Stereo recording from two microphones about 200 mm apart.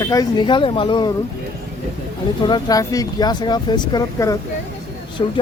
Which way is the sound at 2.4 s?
25° left (ahead or behind).